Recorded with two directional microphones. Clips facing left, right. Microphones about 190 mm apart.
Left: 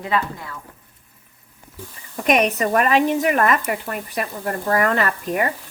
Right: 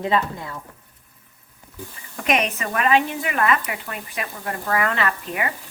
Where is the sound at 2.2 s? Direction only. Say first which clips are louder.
Left 5 dB; 40° left (ahead or behind).